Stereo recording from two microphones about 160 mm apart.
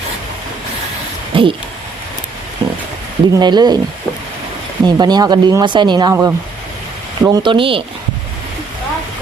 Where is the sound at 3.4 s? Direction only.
25° right (ahead or behind).